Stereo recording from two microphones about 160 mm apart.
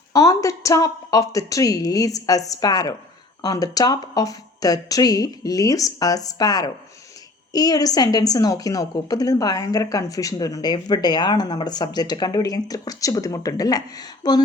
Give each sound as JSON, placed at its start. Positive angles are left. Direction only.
{"t": 0.1, "sound": "a woman's voice", "side_deg": 20}